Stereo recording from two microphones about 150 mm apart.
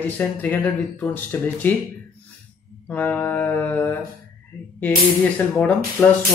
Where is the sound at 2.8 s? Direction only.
10° left (ahead or behind).